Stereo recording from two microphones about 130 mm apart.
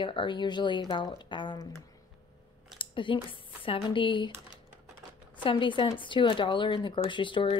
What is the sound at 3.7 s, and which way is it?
Speech, 40° left (ahead or behind).